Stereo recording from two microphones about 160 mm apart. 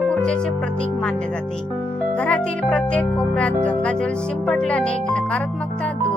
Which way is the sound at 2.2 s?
5° left (ahead or behind).